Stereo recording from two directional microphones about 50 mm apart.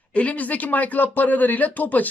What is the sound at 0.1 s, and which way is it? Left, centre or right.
Speech, left.